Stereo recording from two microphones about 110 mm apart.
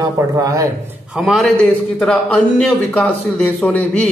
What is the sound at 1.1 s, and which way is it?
A man's voice, centre (ahead or behind).